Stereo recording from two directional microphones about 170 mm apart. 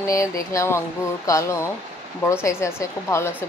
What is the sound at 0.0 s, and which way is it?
A woman's voice, 20° left (ahead or behind).